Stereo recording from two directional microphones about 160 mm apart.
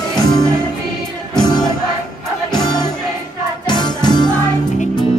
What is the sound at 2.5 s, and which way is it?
Music, 25° left (ahead or behind).